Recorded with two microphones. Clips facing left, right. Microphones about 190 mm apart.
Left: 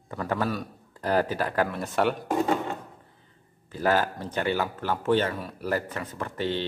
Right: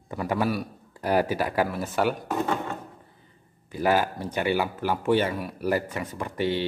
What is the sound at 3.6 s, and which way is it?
Speech, 10° right (ahead or behind).